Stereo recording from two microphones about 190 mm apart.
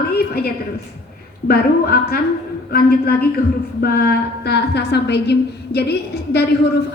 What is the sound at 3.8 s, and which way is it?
A woman's voice, 55° left (ahead or behind).